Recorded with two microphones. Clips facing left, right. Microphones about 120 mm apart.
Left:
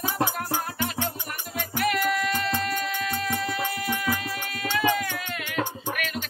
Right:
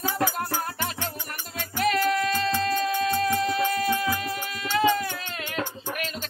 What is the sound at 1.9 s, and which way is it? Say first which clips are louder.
Music: right 3 dB; 30° right (ahead or behind).